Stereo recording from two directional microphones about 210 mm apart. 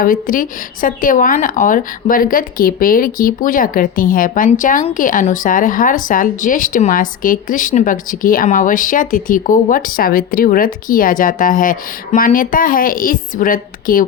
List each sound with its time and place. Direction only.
0.0 s speech: 40° left (ahead or behind)